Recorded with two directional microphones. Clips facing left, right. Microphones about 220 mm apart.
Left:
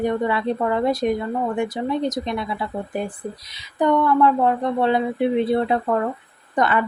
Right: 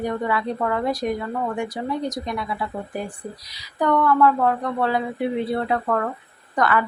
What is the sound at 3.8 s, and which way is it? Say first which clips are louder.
Speech: left 1 dB; 20° left (ahead or behind).